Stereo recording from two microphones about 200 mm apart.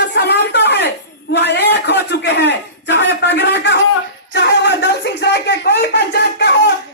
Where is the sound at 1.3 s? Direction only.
60° left (ahead or behind).